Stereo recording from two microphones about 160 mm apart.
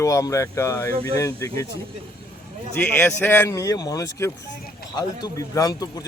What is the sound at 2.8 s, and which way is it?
A man's voice, 10° left (ahead or behind).